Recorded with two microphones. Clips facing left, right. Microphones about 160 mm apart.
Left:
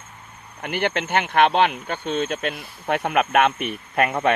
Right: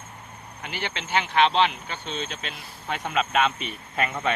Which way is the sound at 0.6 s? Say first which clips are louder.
Left 10 dB; 55° left (ahead or behind).